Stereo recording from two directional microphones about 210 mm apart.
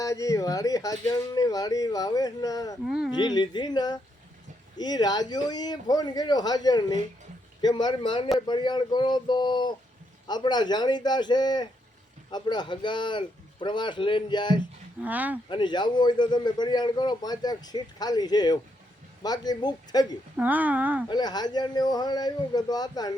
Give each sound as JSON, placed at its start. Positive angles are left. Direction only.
{"t": 0.0, "sound": "speech", "side_deg": 15}
{"t": 2.8, "sound": "speech", "side_deg": 0}
{"t": 3.1, "sound": "a man's voice", "side_deg": 20}
{"t": 15.0, "sound": "speech", "side_deg": -5}
{"t": 15.4, "sound": "a man's voice", "side_deg": 20}
{"t": 20.3, "sound": "speech", "side_deg": -5}
{"t": 21.1, "sound": "a man's voice", "side_deg": 20}